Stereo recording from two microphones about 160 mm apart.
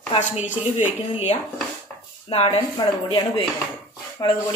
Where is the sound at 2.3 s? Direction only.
35° left (ahead or behind).